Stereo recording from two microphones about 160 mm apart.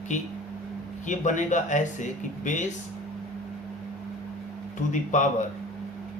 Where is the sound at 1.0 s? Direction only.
50° left (ahead or behind).